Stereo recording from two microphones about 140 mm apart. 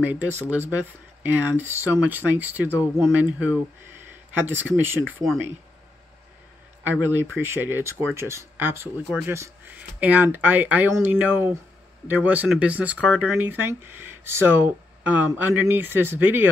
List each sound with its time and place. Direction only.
0.0 s speech: 15° right (ahead or behind)
5.0 s speech: 5° left (ahead or behind)
6.8 s speech: 15° right (ahead or behind)